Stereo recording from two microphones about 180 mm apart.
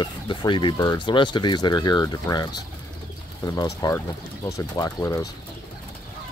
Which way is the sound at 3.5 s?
20° left (ahead or behind).